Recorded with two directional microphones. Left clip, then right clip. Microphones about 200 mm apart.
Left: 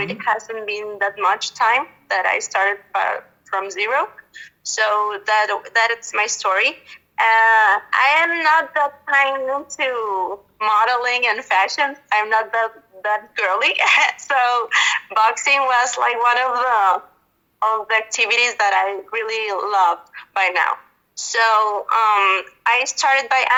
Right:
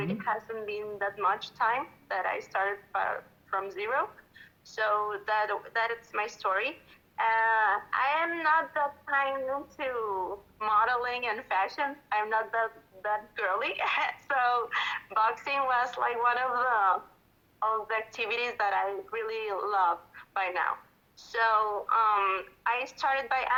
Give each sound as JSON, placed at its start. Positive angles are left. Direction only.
{"t": 0.0, "sound": "speech", "side_deg": 30}